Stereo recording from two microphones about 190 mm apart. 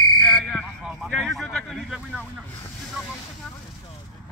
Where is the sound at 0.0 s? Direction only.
25° left (ahead or behind).